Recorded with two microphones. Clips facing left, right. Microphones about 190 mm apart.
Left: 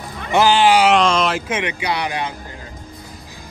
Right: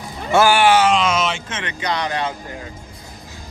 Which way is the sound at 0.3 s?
20° left (ahead or behind).